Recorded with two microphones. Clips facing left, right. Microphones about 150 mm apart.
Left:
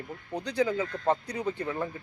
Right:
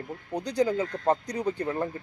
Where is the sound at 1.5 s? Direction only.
35° right (ahead or behind).